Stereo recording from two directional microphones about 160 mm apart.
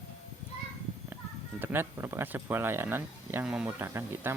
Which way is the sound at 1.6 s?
15° right (ahead or behind).